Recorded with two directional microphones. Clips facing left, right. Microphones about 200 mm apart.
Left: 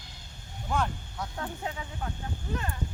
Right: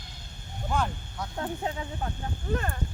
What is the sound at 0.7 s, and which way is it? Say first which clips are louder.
Speech: even; centre (ahead or behind).